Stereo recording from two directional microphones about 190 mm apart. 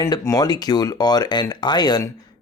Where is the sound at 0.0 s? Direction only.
20° left (ahead or behind).